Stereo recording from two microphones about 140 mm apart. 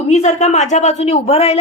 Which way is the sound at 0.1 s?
55° left (ahead or behind).